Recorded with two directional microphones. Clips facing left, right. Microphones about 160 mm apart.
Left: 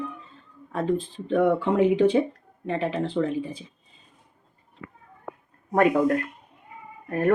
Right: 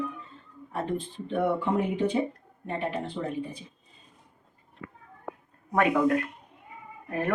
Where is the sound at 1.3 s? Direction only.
90° left.